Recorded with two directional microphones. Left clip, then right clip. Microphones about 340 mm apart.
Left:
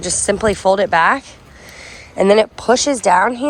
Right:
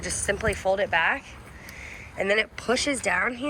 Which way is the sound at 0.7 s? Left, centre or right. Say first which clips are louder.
Left 9 dB; left.